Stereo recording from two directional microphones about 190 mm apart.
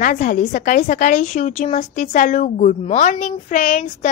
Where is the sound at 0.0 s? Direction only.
45° left (ahead or behind).